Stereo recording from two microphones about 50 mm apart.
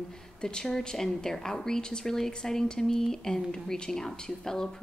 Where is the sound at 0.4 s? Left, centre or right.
Centre.